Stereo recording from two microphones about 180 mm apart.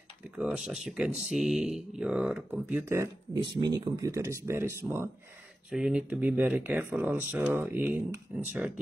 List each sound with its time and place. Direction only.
0.4 s speech: 5° right (ahead or behind)